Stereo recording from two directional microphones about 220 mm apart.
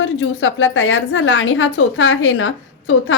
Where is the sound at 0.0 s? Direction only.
60° left (ahead or behind).